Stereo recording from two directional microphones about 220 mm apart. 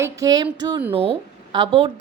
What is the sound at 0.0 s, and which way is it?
Speech, 15° right (ahead or behind).